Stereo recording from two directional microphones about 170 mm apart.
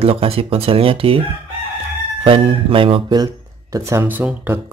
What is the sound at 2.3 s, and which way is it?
Speech, 30° right (ahead or behind).